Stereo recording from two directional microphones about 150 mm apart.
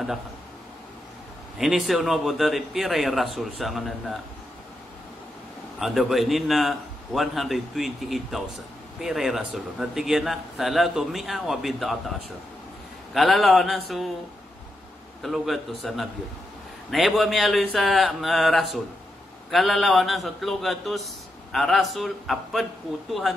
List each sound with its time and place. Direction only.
1.6 s a man's voice: 5° right (ahead or behind)
5.8 s a man's voice: centre (ahead or behind)
13.1 s a man's voice: centre (ahead or behind)
15.2 s a man's voice: centre (ahead or behind)